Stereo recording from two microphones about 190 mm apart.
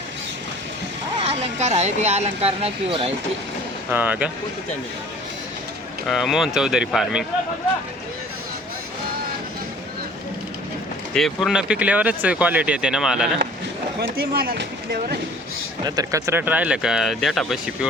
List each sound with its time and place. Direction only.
1.2 s speech: 30° right (ahead or behind)
3.9 s speech: 10° right (ahead or behind)
6.1 s speech: centre (ahead or behind)
11.1 s speech: centre (ahead or behind)
14.0 s speech: 55° right (ahead or behind)
15.8 s speech: 20° right (ahead or behind); by 17.8 s centre (ahead or behind)